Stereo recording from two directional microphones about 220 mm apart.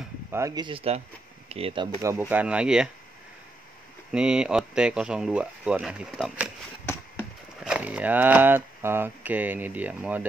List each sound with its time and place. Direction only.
0.3 s speech: 15° right (ahead or behind)
4.1 s speech: 5° right (ahead or behind)
7.6 s speech: 5° right (ahead or behind)